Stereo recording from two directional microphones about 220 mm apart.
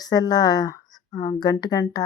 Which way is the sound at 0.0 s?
15° left (ahead or behind).